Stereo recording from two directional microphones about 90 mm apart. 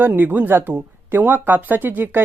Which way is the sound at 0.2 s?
20° right (ahead or behind).